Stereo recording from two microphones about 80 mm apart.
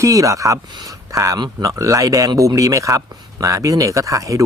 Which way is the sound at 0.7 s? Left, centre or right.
Right.